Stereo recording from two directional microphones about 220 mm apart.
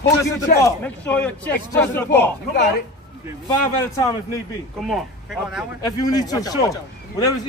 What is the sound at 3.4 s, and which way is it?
Speech, 15° left (ahead or behind).